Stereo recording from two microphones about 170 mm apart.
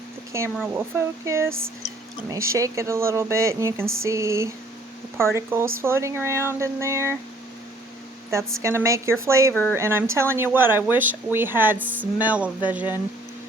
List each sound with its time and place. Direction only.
0.3 s speech: 15° right (ahead or behind)
8.3 s speech: 15° right (ahead or behind)